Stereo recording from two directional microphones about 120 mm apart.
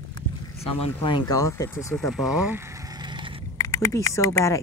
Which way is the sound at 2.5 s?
25° right (ahead or behind).